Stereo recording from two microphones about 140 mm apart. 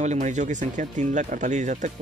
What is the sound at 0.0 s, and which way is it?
Speech, 60° right (ahead or behind).